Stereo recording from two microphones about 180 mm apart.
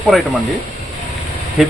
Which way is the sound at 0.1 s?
Centre (ahead or behind).